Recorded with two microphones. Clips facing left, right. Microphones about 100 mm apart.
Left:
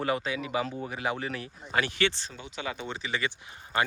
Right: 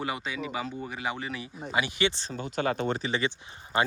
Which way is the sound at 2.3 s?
45° right (ahead or behind).